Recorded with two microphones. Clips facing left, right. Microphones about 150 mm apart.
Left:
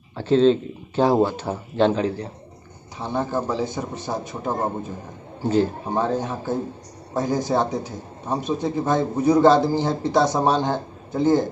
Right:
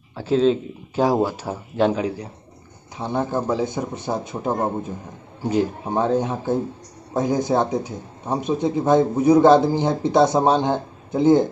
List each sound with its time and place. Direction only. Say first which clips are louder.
0.1 s speech: left 2 dB; 10° right (ahead or behind)